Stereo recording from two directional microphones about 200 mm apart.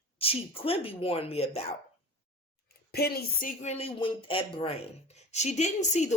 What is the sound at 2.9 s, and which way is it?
Speech, 50° left (ahead or behind).